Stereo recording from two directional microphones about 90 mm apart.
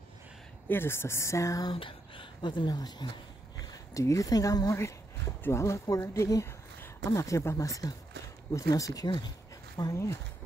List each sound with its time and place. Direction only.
0.7 s speech: 25° left (ahead or behind)
1.7 s speech: 70° left (ahead or behind); by 9.9 s 45° left (ahead or behind)